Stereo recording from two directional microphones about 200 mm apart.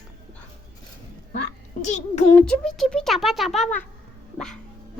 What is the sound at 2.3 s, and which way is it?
Speech, 5° left (ahead or behind).